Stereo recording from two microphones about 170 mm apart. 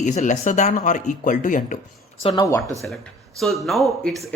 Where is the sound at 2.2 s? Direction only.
25° left (ahead or behind).